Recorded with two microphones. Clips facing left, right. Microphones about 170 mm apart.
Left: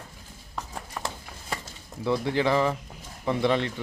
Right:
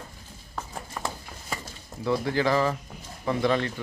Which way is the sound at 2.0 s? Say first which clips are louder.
Even; 25° left (ahead or behind).